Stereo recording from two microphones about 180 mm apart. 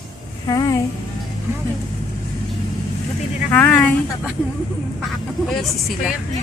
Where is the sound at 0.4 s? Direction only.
20° left (ahead or behind).